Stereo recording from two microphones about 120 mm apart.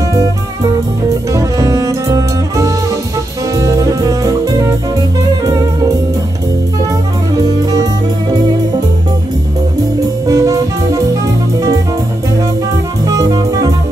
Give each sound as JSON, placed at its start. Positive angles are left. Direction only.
{"t": 1.0, "sound": "music", "side_deg": -25}
{"t": 3.5, "sound": "jazz", "side_deg": -25}
{"t": 5.4, "sound": "music", "side_deg": -30}
{"t": 7.3, "sound": "music", "side_deg": -30}
{"t": 9.9, "sound": "music", "side_deg": -30}
{"t": 13.0, "sound": "jazz", "side_deg": -30}